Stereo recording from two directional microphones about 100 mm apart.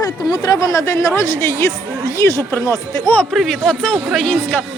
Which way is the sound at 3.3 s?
Centre (ahead or behind).